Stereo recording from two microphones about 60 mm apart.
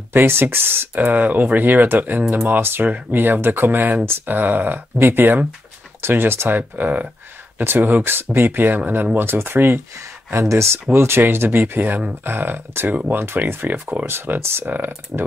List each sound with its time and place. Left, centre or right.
0.1 s speech: right
10.5 s speech: right
15.1 s speech: centre